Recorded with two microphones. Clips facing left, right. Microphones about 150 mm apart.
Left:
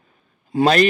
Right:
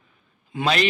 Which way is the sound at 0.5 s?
45° left (ahead or behind).